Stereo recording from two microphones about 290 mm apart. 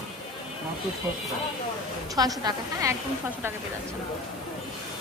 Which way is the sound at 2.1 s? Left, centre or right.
Centre.